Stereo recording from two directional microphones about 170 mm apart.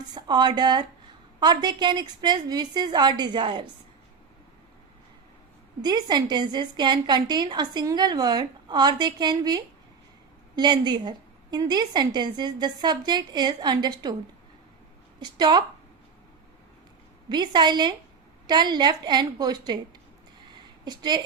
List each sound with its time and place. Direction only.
0.1 s a woman's voice: 25° right (ahead or behind)
5.8 s a woman's voice: 25° right (ahead or behind)
15.2 s a woman's voice: 25° right (ahead or behind)
17.2 s a woman's voice: 25° right (ahead or behind)
20.5 s a sound: 25° right (ahead or behind)